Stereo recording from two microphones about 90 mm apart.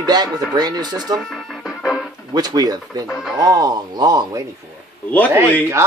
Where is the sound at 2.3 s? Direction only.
50° right (ahead or behind).